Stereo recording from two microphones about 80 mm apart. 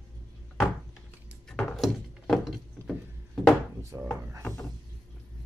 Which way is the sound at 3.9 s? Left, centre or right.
Right.